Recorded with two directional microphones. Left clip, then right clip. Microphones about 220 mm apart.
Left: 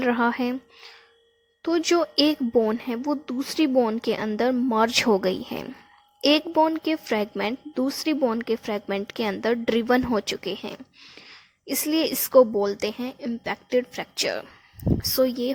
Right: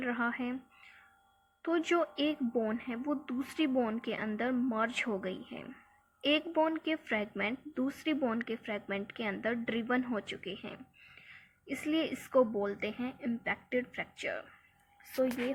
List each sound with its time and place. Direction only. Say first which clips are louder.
0.0 s a woman's voice: left 12 dB; 50° left (ahead or behind)
3.0 s a woman's voice: left 9 dB; 40° left (ahead or behind); by 5.7 s 55° left (ahead or behind)
6.2 s a woman's voice: left 10 dB; 45° left (ahead or behind)